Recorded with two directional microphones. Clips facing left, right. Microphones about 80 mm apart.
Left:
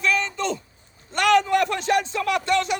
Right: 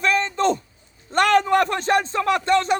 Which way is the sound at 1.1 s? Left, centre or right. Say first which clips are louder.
Right 2 dB; right.